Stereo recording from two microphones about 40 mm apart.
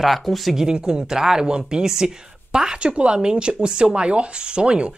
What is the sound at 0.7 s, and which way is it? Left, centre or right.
Speech, right.